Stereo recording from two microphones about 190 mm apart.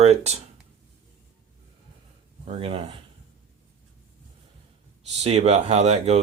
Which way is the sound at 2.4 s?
30° right (ahead or behind).